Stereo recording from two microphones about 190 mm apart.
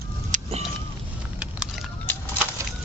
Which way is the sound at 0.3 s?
40° right (ahead or behind).